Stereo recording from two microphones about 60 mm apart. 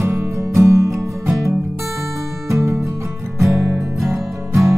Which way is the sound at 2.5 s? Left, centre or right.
Right.